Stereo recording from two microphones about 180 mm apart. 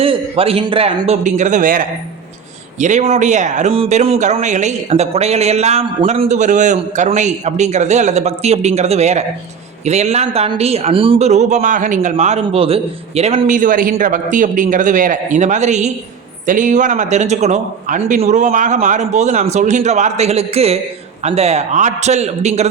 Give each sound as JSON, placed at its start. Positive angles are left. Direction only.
{"t": 0.0, "sound": "speech", "side_deg": -30}